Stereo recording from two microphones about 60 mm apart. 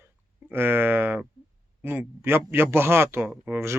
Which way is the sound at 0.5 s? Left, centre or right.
Right.